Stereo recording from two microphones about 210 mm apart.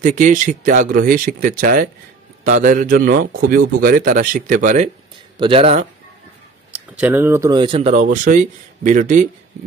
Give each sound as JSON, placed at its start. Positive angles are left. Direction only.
{"t": 0.0, "sound": "a man's voice", "side_deg": -40}
{"t": 5.4, "sound": "speech", "side_deg": -25}
{"t": 6.7, "sound": "speech", "side_deg": -5}